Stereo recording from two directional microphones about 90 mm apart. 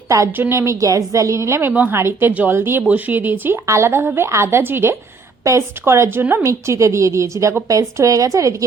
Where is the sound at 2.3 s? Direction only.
15° right (ahead or behind).